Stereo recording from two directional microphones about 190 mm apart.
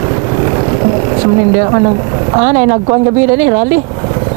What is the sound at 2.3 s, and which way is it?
Speech, 20° right (ahead or behind).